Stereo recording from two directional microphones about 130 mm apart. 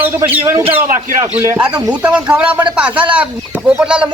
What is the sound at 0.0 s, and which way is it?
Speech, 15° right (ahead or behind).